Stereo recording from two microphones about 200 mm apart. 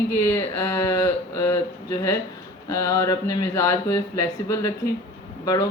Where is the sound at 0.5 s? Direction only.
15° left (ahead or behind).